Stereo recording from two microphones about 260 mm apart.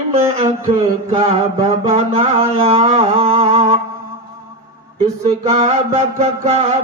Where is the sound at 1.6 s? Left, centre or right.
Right.